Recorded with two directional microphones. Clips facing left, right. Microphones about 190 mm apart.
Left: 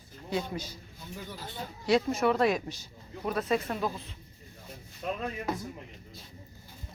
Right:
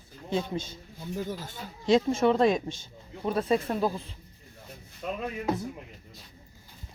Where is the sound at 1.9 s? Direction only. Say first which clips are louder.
Right 3 dB; 25° right (ahead or behind).